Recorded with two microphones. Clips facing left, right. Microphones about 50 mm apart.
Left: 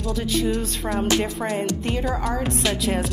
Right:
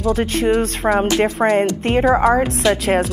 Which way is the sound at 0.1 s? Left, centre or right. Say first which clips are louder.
Right 4 dB; right.